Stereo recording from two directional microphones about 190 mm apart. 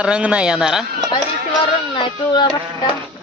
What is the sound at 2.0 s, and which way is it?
Speech, 25° left (ahead or behind).